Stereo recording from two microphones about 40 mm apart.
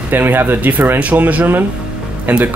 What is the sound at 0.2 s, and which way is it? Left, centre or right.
Speech, right.